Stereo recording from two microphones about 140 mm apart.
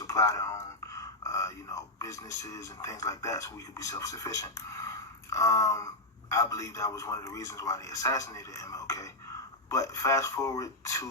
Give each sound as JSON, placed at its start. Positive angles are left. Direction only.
{"t": 0.1, "sound": "speech", "side_deg": 25}